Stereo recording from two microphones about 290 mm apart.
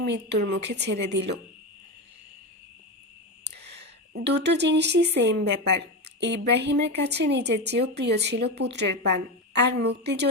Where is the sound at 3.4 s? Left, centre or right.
Right.